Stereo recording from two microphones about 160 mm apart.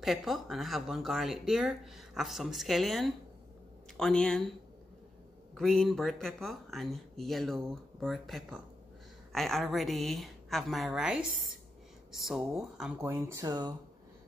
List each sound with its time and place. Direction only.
0.0 s speech: centre (ahead or behind)
5.5 s speech: centre (ahead or behind)
13.0 s speech: 15° right (ahead or behind)